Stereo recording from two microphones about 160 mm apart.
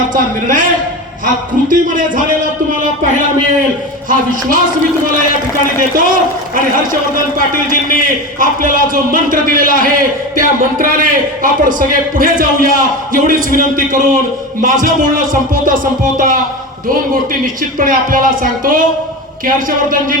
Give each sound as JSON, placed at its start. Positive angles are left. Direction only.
{"t": 0.1, "sound": "a man's voice", "side_deg": -55}
{"t": 4.1, "sound": "a man's voice", "side_deg": -55}
{"t": 7.3, "sound": "a man's voice", "side_deg": -55}
{"t": 17.4, "sound": "a man's voice", "side_deg": -60}